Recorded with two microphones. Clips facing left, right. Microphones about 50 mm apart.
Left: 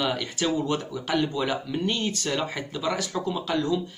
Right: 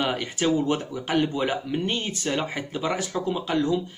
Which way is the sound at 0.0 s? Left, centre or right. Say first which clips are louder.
Right 2 dB; right.